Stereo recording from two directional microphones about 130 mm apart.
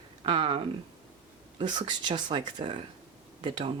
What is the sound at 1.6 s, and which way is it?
Speech, 35° right (ahead or behind).